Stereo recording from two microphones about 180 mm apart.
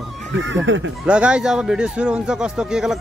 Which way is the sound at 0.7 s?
90° right.